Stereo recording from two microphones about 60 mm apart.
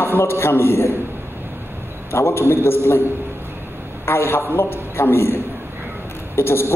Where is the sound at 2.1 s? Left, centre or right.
Left.